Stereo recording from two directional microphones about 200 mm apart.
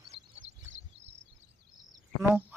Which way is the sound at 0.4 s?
65° right (ahead or behind).